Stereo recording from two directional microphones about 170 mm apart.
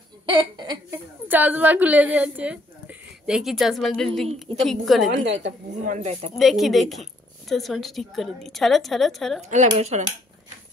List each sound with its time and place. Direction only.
0.3 s a sound: 25° right (ahead or behind)
1.3 s a woman's voice: 10° right (ahead or behind)
5.1 s a woman's voice: 90° right
5.8 s speech: 45° right (ahead or behind)
6.3 s a woman's voice: centre (ahead or behind)
9.4 s speech: 45° right (ahead or behind)